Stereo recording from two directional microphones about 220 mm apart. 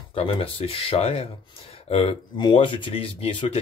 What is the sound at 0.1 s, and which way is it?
Speech, 25° left (ahead or behind).